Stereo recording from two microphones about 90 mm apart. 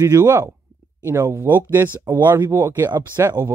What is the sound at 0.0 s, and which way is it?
Speech, 30° right (ahead or behind).